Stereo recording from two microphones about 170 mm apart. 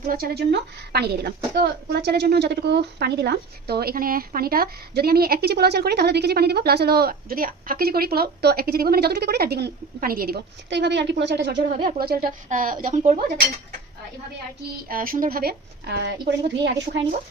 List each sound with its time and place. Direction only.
0.0 s speech: 60° right (ahead or behind); by 11.6 s 80° right
11.9 s speech: 65° right (ahead or behind); by 13.4 s 45° right (ahead or behind)
14.8 s speech: 55° right (ahead or behind); by 16.3 s 85° right